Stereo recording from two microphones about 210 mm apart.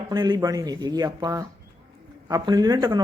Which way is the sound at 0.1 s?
20° right (ahead or behind).